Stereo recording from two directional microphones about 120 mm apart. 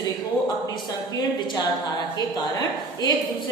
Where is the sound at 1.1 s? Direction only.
35° left (ahead or behind).